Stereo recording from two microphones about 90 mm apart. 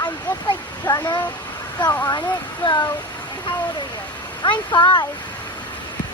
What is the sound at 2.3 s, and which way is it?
Speech, 55° left (ahead or behind).